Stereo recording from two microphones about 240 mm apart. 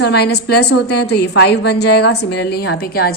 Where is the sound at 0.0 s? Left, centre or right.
Left.